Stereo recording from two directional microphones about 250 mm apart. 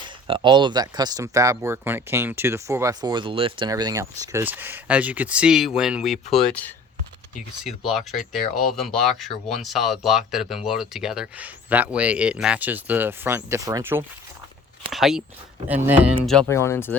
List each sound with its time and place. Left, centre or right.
0.3 s speech: centre
7.9 s speech: centre